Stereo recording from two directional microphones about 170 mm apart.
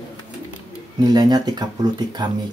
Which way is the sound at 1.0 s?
25° right (ahead or behind).